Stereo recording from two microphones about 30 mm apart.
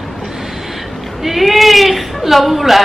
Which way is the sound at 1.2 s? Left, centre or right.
Centre.